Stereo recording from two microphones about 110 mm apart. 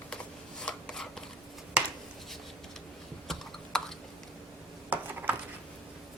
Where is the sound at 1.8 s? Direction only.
10° right (ahead or behind).